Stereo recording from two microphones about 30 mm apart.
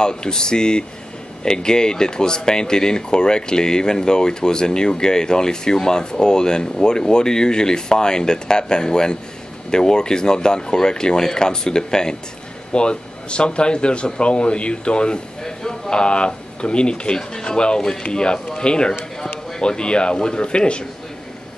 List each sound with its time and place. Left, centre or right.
0.0 s speech: left
12.7 s speech: left
15.4 s a sound: centre
15.9 s speech: left